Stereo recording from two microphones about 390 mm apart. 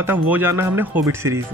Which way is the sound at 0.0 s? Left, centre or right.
Centre.